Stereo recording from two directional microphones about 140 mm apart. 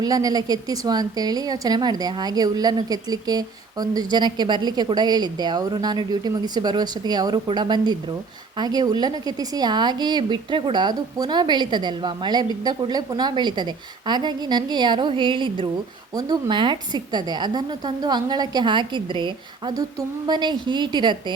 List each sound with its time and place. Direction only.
0.0 s a woman's voice: 25° right (ahead or behind)